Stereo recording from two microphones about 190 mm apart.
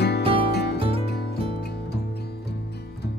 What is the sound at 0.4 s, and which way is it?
Music, 55° left (ahead or behind).